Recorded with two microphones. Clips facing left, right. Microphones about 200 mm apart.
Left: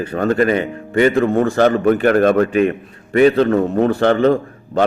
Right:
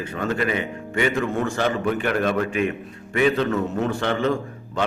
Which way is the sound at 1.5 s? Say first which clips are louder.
Left 9 dB; 50° left (ahead or behind).